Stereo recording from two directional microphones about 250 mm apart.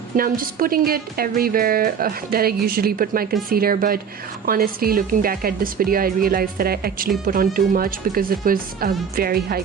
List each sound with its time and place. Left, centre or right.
0.2 s a woman's voice: right